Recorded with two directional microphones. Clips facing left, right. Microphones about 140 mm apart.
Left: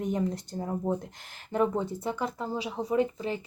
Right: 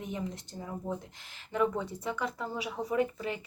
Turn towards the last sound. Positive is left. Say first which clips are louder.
# left 3 dB
turn(degrees=30)  # may be behind; listen again after turning